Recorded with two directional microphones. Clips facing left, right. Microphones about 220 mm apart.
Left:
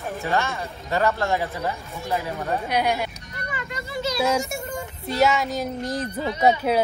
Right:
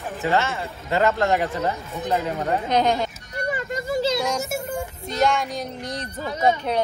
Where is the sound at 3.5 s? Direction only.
45° right (ahead or behind).